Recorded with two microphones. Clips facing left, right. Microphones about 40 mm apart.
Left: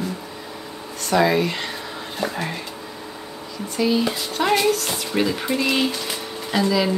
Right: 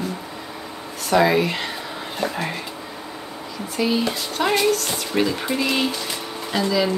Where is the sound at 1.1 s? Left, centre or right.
Centre.